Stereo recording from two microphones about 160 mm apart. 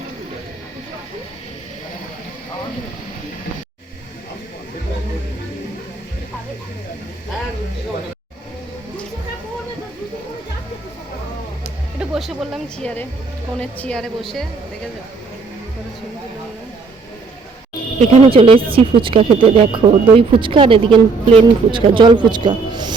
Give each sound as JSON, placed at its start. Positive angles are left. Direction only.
{"t": 11.9, "sound": "a woman's voice", "side_deg": 0}
{"t": 18.1, "sound": "speech", "side_deg": -35}